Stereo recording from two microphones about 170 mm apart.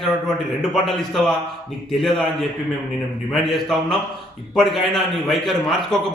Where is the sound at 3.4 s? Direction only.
Centre (ahead or behind).